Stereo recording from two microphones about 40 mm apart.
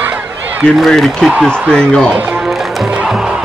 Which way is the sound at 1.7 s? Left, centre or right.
Centre.